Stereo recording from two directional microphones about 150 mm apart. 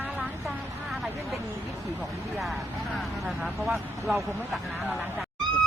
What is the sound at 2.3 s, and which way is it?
Speech, centre (ahead or behind).